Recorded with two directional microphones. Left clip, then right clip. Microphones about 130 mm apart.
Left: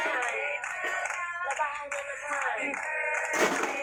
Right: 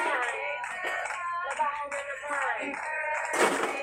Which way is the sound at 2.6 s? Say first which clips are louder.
Left 1 dB; 30° left (ahead or behind).